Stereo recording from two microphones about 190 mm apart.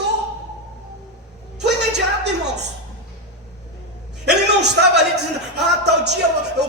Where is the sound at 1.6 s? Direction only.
60° right (ahead or behind).